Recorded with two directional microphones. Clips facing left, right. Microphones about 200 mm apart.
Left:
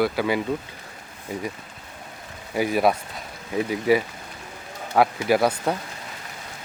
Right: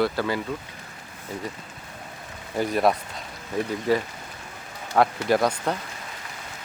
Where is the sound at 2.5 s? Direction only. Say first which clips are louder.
Left 1 dB; 5° left (ahead or behind).